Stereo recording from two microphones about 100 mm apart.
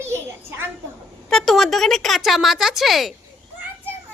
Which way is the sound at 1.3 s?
5° left (ahead or behind).